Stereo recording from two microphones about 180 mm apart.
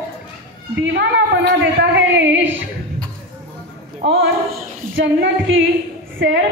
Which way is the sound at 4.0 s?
60° right (ahead or behind).